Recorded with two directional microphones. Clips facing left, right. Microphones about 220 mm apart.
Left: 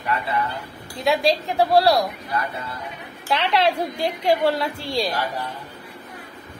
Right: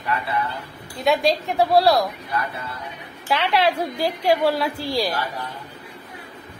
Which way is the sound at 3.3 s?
Centre (ahead or behind).